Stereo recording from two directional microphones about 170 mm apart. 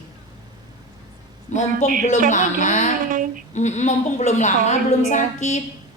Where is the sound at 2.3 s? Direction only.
50° left (ahead or behind).